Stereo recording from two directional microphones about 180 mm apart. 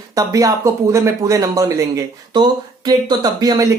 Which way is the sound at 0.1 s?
20° right (ahead or behind).